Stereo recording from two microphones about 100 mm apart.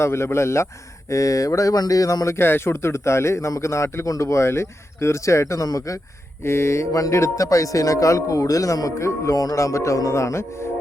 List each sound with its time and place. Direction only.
0.0 s speech: 25° left (ahead or behind)
6.4 s speech: 25° left (ahead or behind)